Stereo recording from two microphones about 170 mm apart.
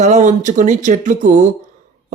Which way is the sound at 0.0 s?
45° right (ahead or behind).